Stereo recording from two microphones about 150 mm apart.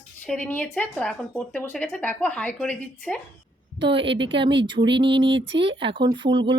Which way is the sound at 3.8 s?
35° right (ahead or behind).